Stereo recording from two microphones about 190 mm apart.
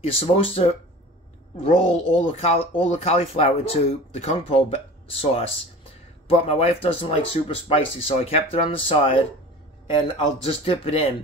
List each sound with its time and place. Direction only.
0.0 s speech: 30° left (ahead or behind)